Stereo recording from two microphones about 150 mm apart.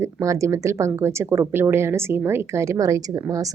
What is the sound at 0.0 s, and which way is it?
A woman's voice, 20° right (ahead or behind).